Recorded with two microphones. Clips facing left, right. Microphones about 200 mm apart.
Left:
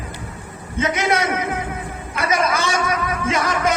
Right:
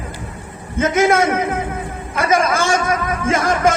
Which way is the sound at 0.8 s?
50° right (ahead or behind).